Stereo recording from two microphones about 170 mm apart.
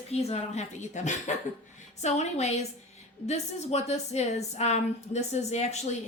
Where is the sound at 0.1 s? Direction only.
40° left (ahead or behind).